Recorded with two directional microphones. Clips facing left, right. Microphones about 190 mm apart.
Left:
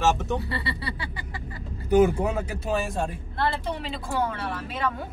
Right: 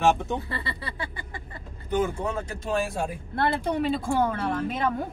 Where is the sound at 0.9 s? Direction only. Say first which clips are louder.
Even; 50° right (ahead or behind).